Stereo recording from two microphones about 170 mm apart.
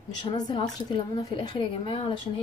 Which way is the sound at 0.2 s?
25° left (ahead or behind).